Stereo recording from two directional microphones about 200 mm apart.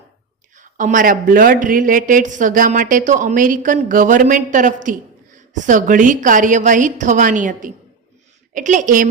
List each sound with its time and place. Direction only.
0.5 s speech: 40° right (ahead or behind)